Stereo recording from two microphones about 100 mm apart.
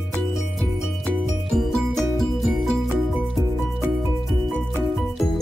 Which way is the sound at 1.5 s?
Centre (ahead or behind).